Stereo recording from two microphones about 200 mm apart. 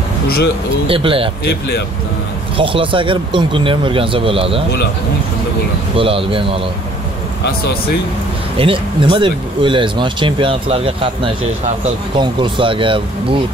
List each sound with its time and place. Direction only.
0.8 s speech: 25° right (ahead or behind)
2.5 s speech: 25° right (ahead or behind)
5.9 s speech: 25° right (ahead or behind)
8.5 s speech: 25° right (ahead or behind)
12.2 s speech: 25° right (ahead or behind)